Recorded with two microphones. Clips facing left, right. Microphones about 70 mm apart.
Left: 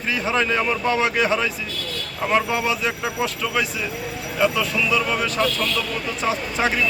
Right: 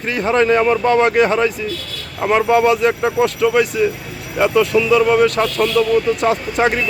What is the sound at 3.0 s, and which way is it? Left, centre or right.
Speech, right.